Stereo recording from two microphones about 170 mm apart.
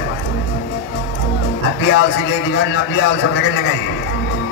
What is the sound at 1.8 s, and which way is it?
A man's voice, 85° left.